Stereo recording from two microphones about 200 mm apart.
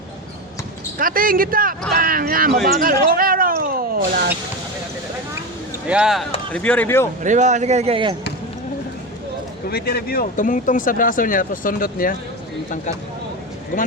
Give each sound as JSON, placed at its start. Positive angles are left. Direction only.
{"t": 0.9, "sound": "speech", "side_deg": -45}
{"t": 5.9, "sound": "speech", "side_deg": -5}
{"t": 7.2, "sound": "speech", "side_deg": -40}
{"t": 9.6, "sound": "speech", "side_deg": 50}